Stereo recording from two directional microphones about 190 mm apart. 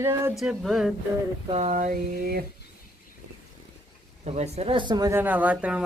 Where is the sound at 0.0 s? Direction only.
15° right (ahead or behind).